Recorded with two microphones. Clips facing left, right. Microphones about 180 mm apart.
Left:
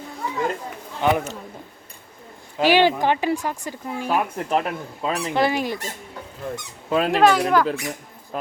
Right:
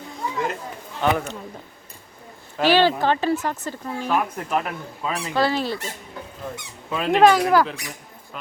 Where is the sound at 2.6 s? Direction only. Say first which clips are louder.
Left 1 dB; 15° left (ahead or behind).